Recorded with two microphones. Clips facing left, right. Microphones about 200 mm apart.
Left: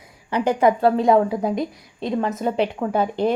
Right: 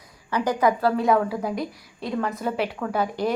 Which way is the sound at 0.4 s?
25° left (ahead or behind).